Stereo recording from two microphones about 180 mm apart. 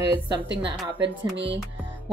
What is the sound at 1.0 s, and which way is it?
Music, 75° right (ahead or behind).